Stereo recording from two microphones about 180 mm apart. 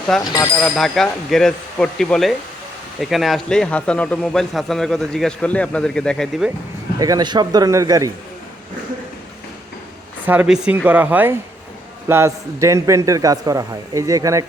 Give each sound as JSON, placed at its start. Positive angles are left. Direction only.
{"t": 0.1, "sound": "a man's voice", "side_deg": 0}
{"t": 7.0, "sound": "speech", "side_deg": -20}
{"t": 10.2, "sound": "a man's voice", "side_deg": -5}